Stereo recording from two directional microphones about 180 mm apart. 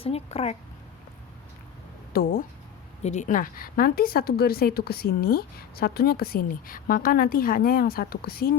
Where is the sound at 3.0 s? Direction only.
40° left (ahead or behind).